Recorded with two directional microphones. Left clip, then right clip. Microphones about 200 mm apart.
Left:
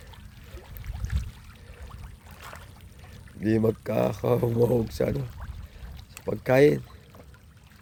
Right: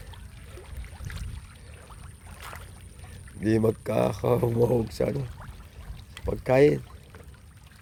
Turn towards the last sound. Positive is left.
turn(degrees=15)  # may be behind; listen again after turning